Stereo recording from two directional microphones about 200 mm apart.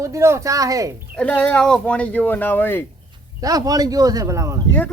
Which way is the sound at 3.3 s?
15° right (ahead or behind).